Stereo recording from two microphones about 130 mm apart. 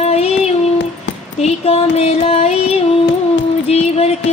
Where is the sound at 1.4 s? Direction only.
55° left (ahead or behind).